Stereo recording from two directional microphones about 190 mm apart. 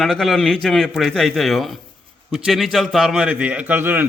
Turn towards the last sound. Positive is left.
turn(degrees=-10)  # may be behind; listen again after turning